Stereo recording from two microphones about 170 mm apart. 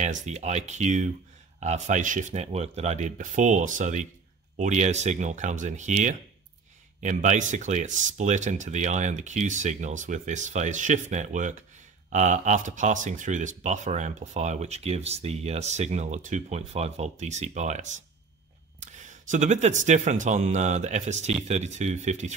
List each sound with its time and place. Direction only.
0.0 s speech: 45° right (ahead or behind)